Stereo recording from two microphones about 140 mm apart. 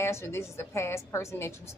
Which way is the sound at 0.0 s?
20° left (ahead or behind).